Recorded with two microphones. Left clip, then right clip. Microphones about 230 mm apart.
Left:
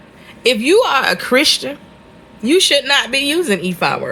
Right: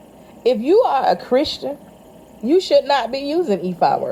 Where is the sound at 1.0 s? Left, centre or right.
Right.